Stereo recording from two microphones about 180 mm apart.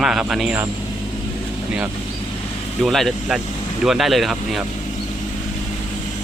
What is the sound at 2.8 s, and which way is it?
Speech, centre (ahead or behind).